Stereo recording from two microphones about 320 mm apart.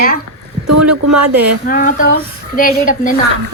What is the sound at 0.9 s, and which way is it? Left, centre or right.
Speech, right.